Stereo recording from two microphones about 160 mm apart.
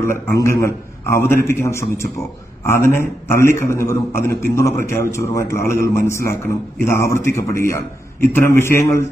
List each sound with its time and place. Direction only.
0.3 s a man's voice: 15° left (ahead or behind)